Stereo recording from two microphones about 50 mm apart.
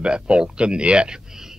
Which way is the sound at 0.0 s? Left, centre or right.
Right.